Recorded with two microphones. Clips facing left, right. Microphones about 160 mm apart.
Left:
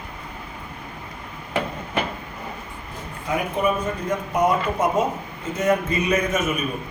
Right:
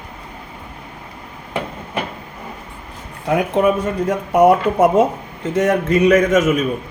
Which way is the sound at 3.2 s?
85° right.